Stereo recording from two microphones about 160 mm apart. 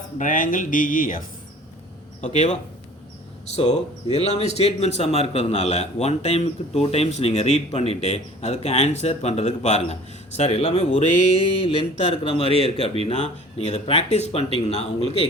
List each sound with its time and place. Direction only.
0.2 s speech: 55° left (ahead or behind)
2.2 s speech: 50° left (ahead or behind)
11.9 s speech: 40° left (ahead or behind)